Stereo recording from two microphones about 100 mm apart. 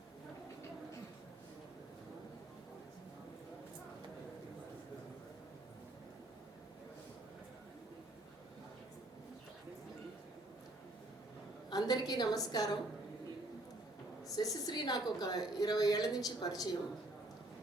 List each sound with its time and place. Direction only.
11.7 s a woman's voice: 40° left (ahead or behind)
14.3 s a woman's voice: 40° left (ahead or behind)